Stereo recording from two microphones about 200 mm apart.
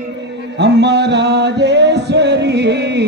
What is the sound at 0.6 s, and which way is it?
Music, 60° right (ahead or behind).